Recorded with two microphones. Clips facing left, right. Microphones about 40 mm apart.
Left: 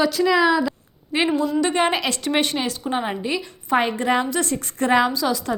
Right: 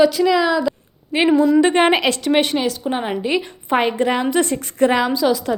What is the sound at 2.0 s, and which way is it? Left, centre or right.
A woman's voice, centre.